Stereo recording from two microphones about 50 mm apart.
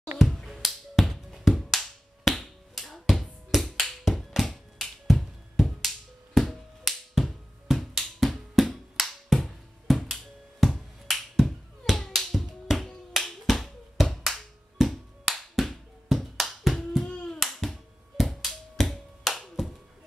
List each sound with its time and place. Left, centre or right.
0.0 s finger snapping: centre
3.8 s music: centre
9.0 s finger snapping: centre
17.1 s hands: centre
17.4 s finger snapping: centre